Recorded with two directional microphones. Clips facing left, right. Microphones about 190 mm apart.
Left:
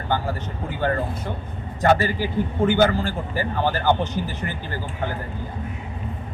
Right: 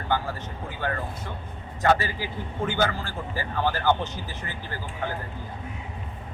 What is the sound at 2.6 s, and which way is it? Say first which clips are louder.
A man's voice: left 7 dB; 15° left (ahead or behind).